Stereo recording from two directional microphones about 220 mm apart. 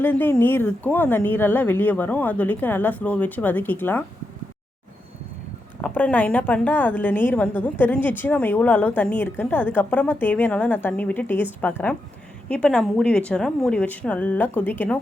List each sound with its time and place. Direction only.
0.0 s speech: 10° left (ahead or behind)
5.8 s a woman's voice: 5° left (ahead or behind)